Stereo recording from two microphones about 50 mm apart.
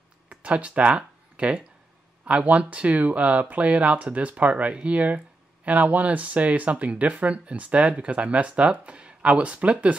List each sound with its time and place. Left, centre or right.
0.3 s speech: right